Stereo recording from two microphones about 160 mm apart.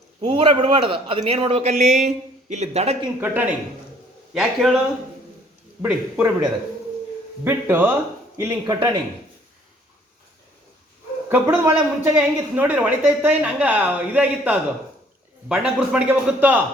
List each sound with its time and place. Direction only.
0.2 s speech: 30° right (ahead or behind)
3.2 s a man's voice: 10° right (ahead or behind)
5.8 s speech: 10° right (ahead or behind)
11.3 s speech: 15° right (ahead or behind)